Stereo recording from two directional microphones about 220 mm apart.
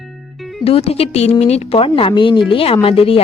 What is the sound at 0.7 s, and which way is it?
A woman's voice, 25° left (ahead or behind).